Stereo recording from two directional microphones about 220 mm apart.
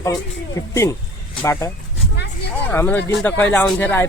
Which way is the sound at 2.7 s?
10° left (ahead or behind).